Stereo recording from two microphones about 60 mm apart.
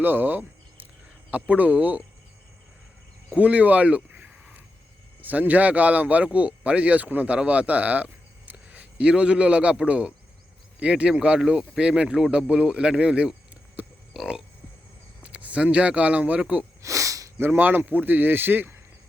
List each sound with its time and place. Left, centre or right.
0.0 s cricket: right
1.3 s speech: right
3.3 s speech: right
5.2 s a man's voice: right
13.8 s a sound: right
15.2 s speech: right
16.8 s a sound: right
17.4 s speech: right